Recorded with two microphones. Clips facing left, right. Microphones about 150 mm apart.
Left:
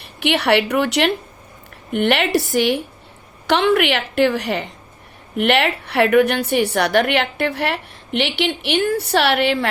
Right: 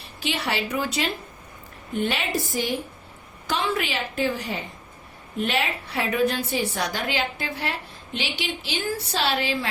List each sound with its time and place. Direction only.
0.0 s a woman's voice: 70° left (ahead or behind)